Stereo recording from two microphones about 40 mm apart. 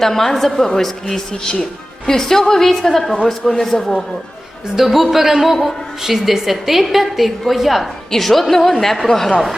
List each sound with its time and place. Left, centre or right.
0.0 s a woman's voice: centre
4.8 s a woman's voice: centre